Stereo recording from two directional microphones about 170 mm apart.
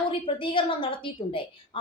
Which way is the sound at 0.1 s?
30° left (ahead or behind).